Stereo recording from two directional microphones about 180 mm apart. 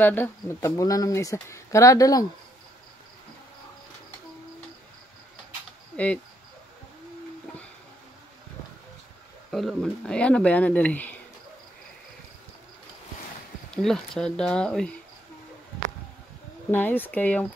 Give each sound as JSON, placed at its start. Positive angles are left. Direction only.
{"t": 0.0, "sound": "speech", "side_deg": 10}
{"t": 9.5, "sound": "speech", "side_deg": 0}
{"t": 13.7, "sound": "speech", "side_deg": 0}
{"t": 16.7, "sound": "speech", "side_deg": 10}